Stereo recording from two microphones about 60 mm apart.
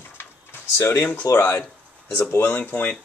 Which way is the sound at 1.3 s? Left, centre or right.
Left.